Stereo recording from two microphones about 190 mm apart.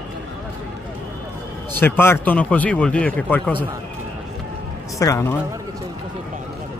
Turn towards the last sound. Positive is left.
turn(degrees=15)  # may be behind; listen again after turning